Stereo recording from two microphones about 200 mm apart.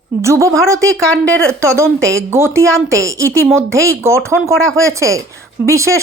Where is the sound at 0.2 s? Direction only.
15° right (ahead or behind).